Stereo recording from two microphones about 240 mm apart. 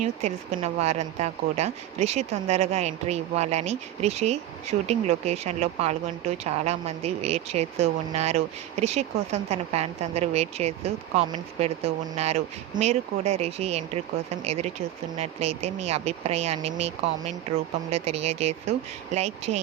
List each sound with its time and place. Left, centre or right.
0.0 s speech: right